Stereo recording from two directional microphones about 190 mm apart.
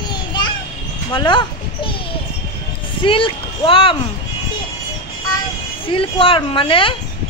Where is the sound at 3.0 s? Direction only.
25° left (ahead or behind).